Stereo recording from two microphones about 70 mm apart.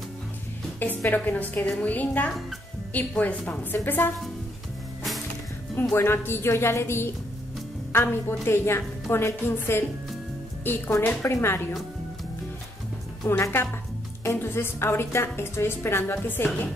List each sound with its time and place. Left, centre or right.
0.7 s a woman's voice: left
5.9 s a woman's voice: left
13.4 s a woman's voice: left